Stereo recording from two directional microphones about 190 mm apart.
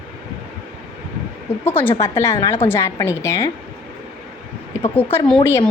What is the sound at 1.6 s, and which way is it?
Speech, 10° left (ahead or behind).